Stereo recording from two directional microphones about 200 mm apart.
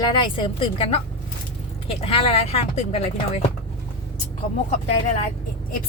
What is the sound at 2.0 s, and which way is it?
Speech, 30° left (ahead or behind).